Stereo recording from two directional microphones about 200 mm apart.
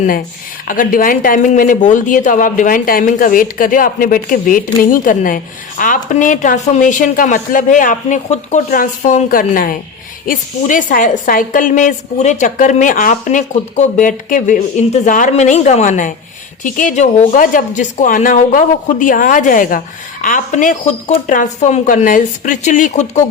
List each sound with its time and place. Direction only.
0.7 s speech: 45° left (ahead or behind)